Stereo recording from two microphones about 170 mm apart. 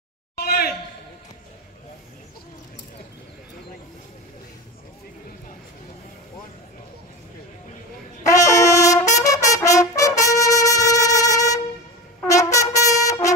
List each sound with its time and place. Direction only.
0.4 s a sound: 65° left (ahead or behind)
8.3 s brass instrument: 20° left (ahead or behind)
12.2 s trumpet: 20° left (ahead or behind)